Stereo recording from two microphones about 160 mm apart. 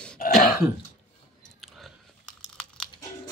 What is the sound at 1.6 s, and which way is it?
Chewing, 5° left (ahead or behind).